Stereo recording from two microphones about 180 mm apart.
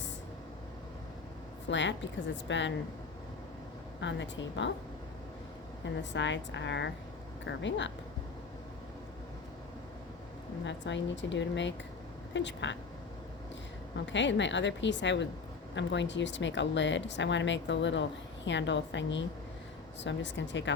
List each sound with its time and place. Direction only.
1.6 s speech: 80° left
4.0 s speech: 85° left
6.0 s speech: 85° left
10.7 s speech: 85° left
14.0 s speech: 85° left